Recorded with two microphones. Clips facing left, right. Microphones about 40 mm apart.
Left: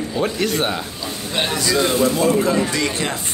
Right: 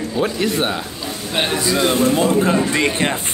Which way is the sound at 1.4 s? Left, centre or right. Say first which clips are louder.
Right 1 dB; right.